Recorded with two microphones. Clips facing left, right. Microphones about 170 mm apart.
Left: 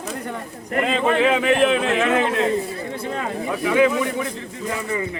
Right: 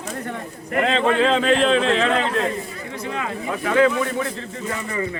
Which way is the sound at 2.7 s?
35° left (ahead or behind).